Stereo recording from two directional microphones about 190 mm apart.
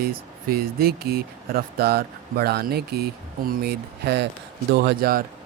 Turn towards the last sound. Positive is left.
turn(degrees=-55)  # may be behind; listen again after turning